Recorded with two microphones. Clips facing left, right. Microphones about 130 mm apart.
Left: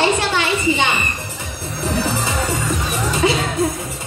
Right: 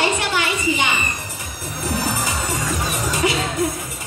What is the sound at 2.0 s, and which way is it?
Music, 25° left (ahead or behind).